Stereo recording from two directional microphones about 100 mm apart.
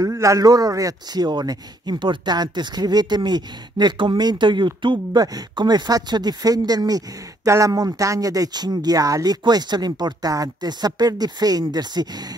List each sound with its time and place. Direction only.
0.0 s a man's voice: 30° right (ahead or behind)